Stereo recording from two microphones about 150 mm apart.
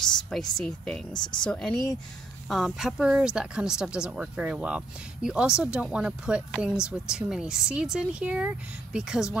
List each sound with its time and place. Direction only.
0.6 s speech: 5° left (ahead or behind)
1.1 s speech: 30° left (ahead or behind)
1.4 s speech: 5° left (ahead or behind)